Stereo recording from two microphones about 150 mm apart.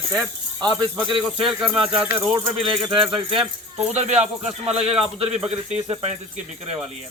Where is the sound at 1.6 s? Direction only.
5° right (ahead or behind).